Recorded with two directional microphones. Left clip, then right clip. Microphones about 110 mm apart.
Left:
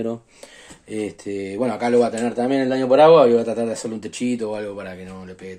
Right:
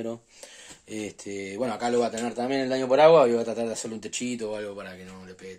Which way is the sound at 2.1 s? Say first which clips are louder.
Left 7 dB; 30° right (ahead or behind).